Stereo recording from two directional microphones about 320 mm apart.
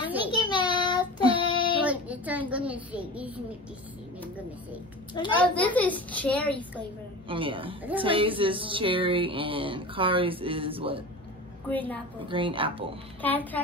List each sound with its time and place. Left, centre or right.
0.3 s child singing: centre
1.8 s music: centre
5.1 s a child's voice: centre
6.8 s speech: centre
11.7 s a child's voice: centre
12.3 s speech: centre
13.2 s a child's voice: centre